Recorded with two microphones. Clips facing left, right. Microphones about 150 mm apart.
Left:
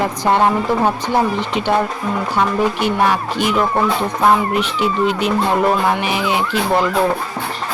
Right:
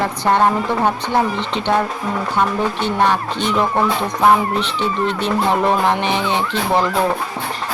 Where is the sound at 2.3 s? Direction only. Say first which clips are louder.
Left 2 dB; 10° left (ahead or behind).